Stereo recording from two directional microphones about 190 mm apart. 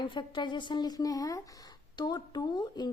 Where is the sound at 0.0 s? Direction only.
25° left (ahead or behind).